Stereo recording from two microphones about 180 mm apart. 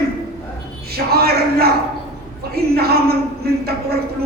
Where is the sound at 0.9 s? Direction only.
60° right (ahead or behind).